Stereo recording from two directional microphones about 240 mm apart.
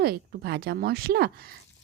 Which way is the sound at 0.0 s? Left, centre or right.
Right.